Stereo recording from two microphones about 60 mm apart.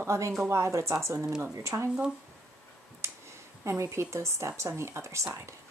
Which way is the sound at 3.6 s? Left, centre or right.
Right.